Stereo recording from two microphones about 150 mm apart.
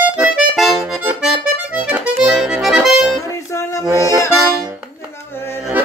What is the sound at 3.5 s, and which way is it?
Music, 20° left (ahead or behind).